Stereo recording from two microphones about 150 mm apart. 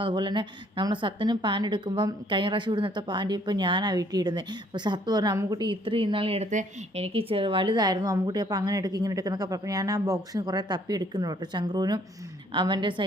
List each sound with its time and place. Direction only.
0.0 s a woman's voice: 30° right (ahead or behind)
5.6 s speech: 35° right (ahead or behind)
6.5 s a woman's voice: 50° right (ahead or behind); by 13.1 s 35° right (ahead or behind)